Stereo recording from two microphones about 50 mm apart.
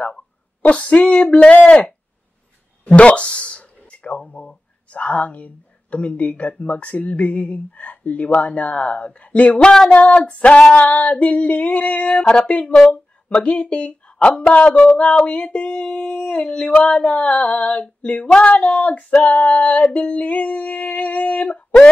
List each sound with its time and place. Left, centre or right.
0.6 s speech: left
3.0 s speech: left
9.6 s speech: centre
9.9 s speech: left
15.0 s speech: centre; by 21.5 s left